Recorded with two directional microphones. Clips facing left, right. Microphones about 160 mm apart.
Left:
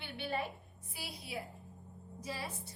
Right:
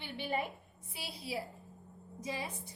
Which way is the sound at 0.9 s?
30° right (ahead or behind).